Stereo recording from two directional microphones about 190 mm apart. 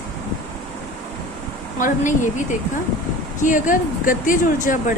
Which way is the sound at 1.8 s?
40° left (ahead or behind).